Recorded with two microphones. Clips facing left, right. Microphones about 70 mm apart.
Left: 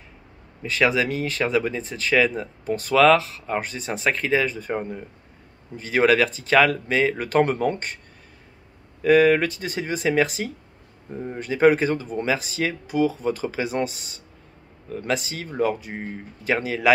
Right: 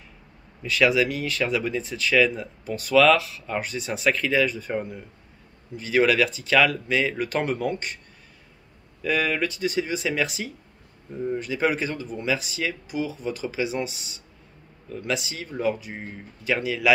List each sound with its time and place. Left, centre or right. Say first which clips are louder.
0.7 s speech: even; left
9.0 s speech: left 8 dB; left